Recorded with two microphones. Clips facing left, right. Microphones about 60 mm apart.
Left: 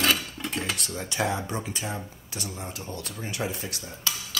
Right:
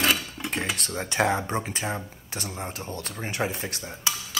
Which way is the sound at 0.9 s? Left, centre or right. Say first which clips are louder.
Right 5 dB; right.